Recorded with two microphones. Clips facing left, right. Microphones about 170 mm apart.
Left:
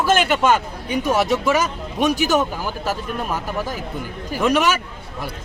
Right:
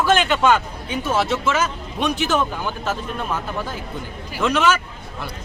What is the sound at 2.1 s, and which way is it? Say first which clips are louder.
Speech: left 1 dB; 40° left (ahead or behind).